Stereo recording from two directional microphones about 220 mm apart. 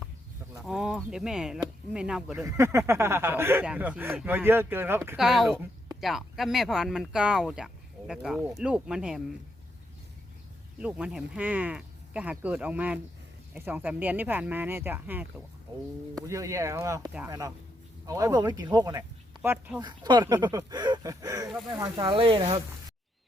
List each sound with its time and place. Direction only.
0.6 s speech: 5° right (ahead or behind)
10.8 s speech: 5° right (ahead or behind)
19.8 s speech: 20° right (ahead or behind)